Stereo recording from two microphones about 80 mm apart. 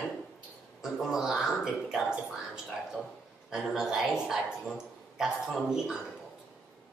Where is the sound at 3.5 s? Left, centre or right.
Centre.